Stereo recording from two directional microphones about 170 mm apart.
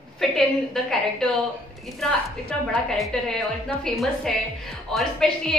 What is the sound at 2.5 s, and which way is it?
A woman's voice, 5° left (ahead or behind).